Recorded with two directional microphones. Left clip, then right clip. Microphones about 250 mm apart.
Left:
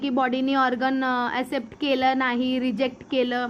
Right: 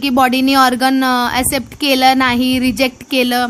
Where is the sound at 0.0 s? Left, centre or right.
Right.